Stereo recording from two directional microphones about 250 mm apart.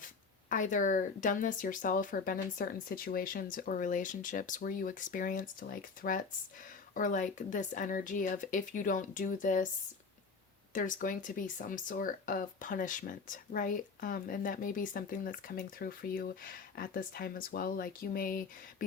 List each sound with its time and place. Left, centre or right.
0.5 s speech: left
10.8 s speech: left